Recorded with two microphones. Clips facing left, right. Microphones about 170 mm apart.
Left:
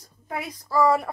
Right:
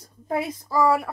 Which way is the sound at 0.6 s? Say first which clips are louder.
Left 1 dB; 10° right (ahead or behind).